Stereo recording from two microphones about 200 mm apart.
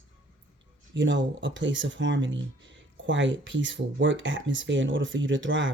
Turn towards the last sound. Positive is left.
turn(degrees=-70)  # may be behind; listen again after turning